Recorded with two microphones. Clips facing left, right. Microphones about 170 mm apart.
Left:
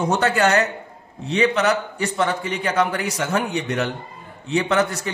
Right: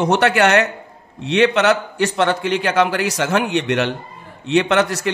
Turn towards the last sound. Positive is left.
turn(degrees=-85)